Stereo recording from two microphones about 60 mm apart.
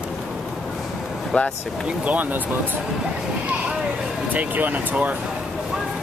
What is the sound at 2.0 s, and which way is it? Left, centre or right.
Speech, right.